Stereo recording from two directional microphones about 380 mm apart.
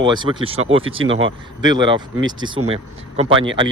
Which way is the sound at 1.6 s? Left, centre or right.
Centre.